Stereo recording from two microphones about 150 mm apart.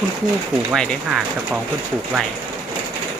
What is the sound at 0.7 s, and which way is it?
Speech, 5° right (ahead or behind).